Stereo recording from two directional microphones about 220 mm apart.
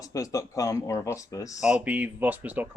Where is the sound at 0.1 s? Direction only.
15° left (ahead or behind).